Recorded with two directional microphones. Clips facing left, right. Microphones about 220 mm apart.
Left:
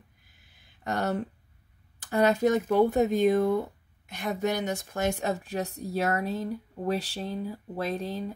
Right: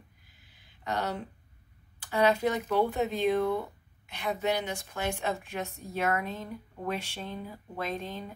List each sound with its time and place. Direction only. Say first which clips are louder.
0.8 s a woman's voice: left 4 dB; 45° left (ahead or behind)